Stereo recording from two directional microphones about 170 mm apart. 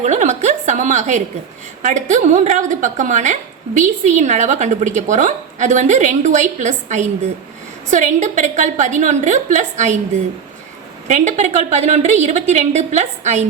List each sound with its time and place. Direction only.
0.0 s a woman's voice: 45° right (ahead or behind)
11.1 s a woman's voice: 45° right (ahead or behind)